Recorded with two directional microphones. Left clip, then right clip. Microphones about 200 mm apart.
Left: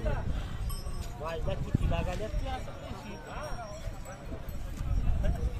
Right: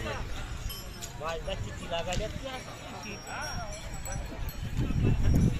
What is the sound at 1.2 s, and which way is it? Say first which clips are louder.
Speech: right 1 dB; 45° left (ahead or behind).